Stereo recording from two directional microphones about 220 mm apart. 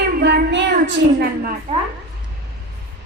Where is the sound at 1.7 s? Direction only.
30° right (ahead or behind).